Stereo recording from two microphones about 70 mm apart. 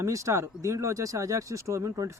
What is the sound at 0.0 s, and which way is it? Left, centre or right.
Speech, right.